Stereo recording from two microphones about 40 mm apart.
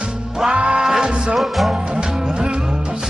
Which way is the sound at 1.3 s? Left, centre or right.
Centre.